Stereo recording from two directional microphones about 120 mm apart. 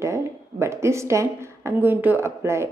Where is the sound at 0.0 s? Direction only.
25° right (ahead or behind).